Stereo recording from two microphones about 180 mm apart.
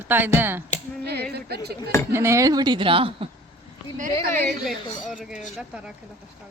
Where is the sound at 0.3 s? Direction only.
10° right (ahead or behind).